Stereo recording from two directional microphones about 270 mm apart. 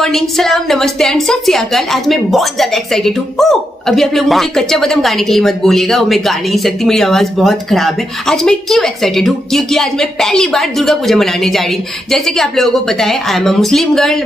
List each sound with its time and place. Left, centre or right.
0.0 s a woman's voice: centre